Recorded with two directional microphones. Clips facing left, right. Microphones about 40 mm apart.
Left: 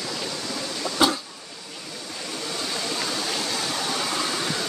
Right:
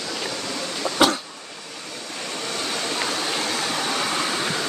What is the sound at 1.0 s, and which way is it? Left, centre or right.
Cough, right.